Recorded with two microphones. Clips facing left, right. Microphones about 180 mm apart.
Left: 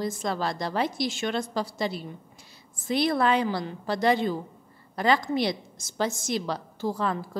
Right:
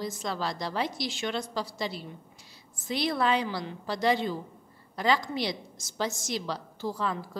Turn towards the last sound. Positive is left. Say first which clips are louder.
# left 4 dB
turn(degrees=50)  # may be behind; listen again after turning